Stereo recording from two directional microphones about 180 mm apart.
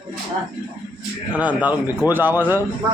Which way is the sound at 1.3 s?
10° right (ahead or behind).